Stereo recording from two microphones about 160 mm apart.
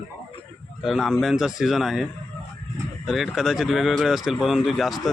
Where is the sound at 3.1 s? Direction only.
Centre (ahead or behind).